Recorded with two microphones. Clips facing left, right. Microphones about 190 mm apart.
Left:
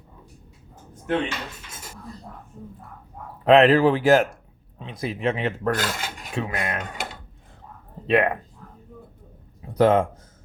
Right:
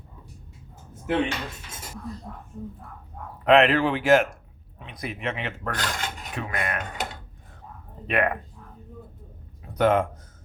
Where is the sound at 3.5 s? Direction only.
35° left (ahead or behind).